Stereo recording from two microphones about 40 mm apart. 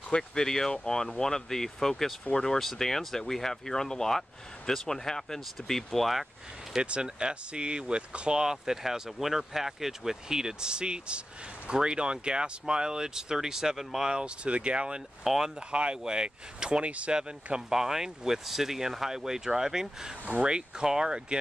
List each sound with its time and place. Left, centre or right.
0.3 s speech: centre
6.8 s speech: right
14.1 s speech: right
15.2 s speech: centre
15.7 s speech: right
16.8 s speech: right
17.1 s speech: centre